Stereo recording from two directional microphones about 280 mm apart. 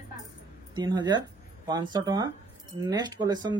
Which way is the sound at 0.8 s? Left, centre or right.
Centre.